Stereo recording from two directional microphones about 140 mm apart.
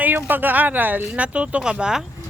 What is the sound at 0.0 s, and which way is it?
Speech, 15° right (ahead or behind).